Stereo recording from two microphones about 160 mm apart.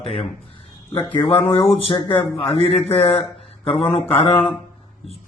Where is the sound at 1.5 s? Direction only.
35° left (ahead or behind).